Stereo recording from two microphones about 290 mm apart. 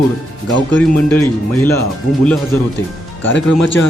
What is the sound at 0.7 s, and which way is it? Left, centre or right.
A man's voice, centre.